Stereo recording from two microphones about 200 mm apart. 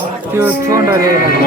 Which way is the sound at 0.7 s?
15° right (ahead or behind).